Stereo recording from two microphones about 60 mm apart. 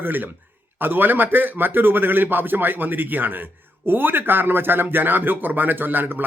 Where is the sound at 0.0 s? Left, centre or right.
Right.